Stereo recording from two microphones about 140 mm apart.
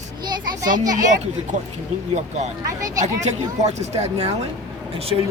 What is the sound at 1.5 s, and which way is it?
Speech, 60° right (ahead or behind).